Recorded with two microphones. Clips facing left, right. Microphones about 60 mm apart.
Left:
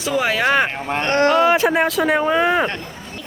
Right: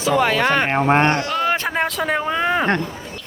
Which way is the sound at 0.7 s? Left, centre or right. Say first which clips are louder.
Right 8 dB; right.